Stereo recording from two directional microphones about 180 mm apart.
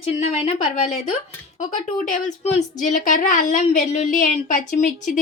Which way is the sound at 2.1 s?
40° left (ahead or behind).